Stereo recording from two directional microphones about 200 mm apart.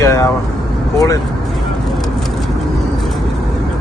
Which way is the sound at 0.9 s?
15° left (ahead or behind).